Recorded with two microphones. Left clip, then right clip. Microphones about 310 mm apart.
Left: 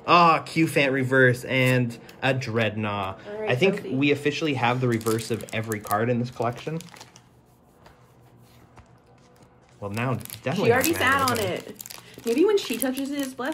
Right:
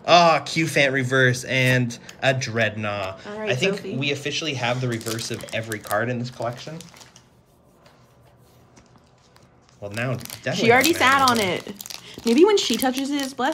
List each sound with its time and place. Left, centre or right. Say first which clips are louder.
0.0 s speech: right 2 dB; centre
6.9 s a sound: left 1 dB; left
9.8 s speech: right 1 dB; centre
10.6 s speech: right 5 dB; right
11.9 s a sound: right 6 dB; centre
12.4 s speech: right 5 dB; right